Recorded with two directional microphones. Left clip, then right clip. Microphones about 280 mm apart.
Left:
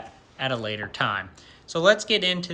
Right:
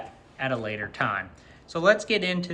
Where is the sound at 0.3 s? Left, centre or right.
Centre.